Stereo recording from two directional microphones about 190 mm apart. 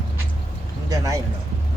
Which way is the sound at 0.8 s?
20° right (ahead or behind).